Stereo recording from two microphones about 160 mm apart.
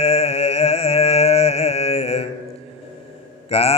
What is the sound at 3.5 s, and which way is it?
Mantra, 40° left (ahead or behind).